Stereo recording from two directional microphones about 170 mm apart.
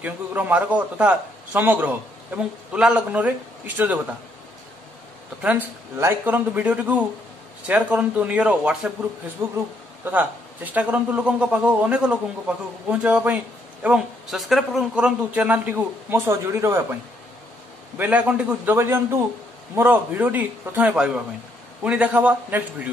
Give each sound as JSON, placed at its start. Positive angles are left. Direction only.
{"t": 0.0, "sound": "a man's voice", "side_deg": -10}
{"t": 5.4, "sound": "a man's voice", "side_deg": -10}
{"t": 9.4, "sound": "a man's voice", "side_deg": -20}
{"t": 17.9, "sound": "a man's voice", "side_deg": -10}